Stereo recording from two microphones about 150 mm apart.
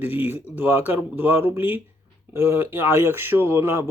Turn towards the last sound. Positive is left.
turn(degrees=-15)  # may be behind; listen again after turning